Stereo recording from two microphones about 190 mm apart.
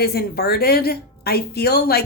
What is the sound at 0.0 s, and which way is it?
A woman's voice, 55° left (ahead or behind).